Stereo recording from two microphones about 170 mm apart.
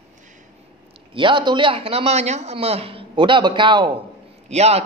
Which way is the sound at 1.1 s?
30° right (ahead or behind).